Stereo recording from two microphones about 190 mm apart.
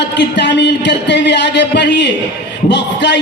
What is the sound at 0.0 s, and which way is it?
Speech, 65° left (ahead or behind).